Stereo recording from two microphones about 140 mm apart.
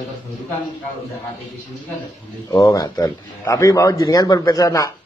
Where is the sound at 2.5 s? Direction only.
25° left (ahead or behind).